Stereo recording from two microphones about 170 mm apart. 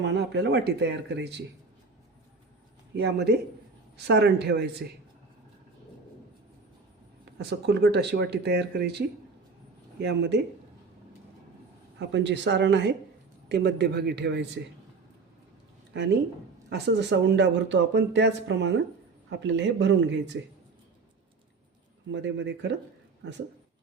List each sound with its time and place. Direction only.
0.0 s speech: 90° right
2.9 s speech: 80° right
7.3 s speech: 75° right (ahead or behind)
10.0 s speech: 85° right
11.9 s speech: 90° right
13.5 s speech: 75° right (ahead or behind)
15.9 s speech: 90° right
22.1 s speech: 90° right